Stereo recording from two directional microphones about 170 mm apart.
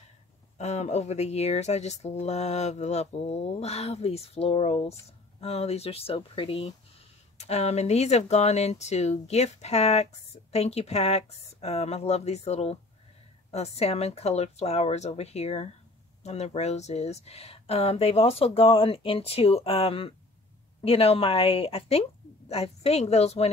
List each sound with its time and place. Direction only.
0.6 s speech: 40° left (ahead or behind)